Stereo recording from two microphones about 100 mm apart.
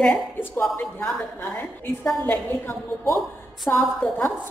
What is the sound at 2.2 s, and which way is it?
Speech, 15° left (ahead or behind).